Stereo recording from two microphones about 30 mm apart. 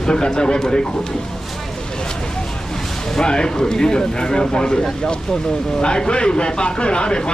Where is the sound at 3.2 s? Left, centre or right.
Left.